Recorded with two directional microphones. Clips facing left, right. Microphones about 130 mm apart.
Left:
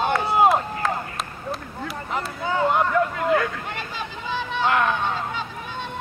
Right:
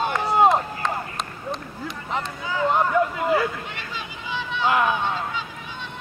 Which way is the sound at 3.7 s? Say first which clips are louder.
Left 3 dB; 45° left (ahead or behind).